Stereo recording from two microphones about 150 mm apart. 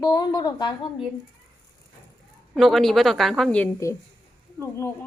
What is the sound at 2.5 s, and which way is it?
A woman's voice, centre (ahead or behind).